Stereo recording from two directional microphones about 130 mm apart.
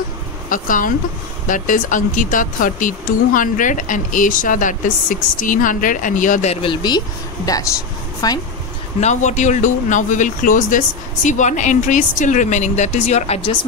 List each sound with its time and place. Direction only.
0.5 s speech: 90° left
6.5 s speech: 40° left (ahead or behind)
8.2 s speech: 30° left (ahead or behind)
9.0 s speech: 65° left (ahead or behind); by 10.8 s 85° left
11.2 s speech: 70° left (ahead or behind)